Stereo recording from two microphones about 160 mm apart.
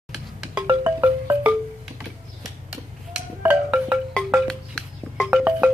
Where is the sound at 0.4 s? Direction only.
10° right (ahead or behind).